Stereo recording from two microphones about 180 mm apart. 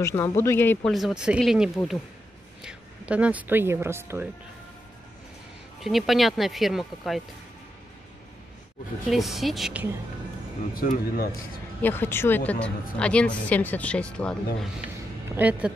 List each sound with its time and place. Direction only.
0.0 s a woman's voice: 15° left (ahead or behind)
0.9 s speech: 5° right (ahead or behind)
5.8 s speech: centre (ahead or behind)
9.1 s speech: centre (ahead or behind)
10.7 s speech: 50° left (ahead or behind)
11.8 s a woman's voice: 10° left (ahead or behind)
15.2 s speech: 10° right (ahead or behind)